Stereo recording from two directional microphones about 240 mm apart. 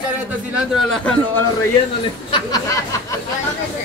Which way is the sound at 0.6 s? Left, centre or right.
Centre.